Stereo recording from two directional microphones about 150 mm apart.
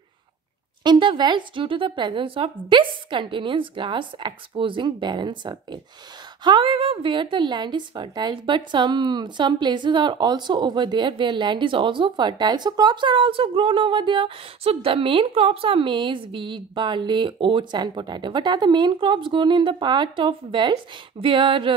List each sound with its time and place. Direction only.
0.8 s a woman's voice: 30° right (ahead or behind)